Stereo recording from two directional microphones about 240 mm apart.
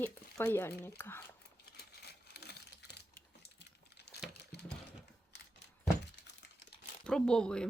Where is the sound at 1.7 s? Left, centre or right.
Left.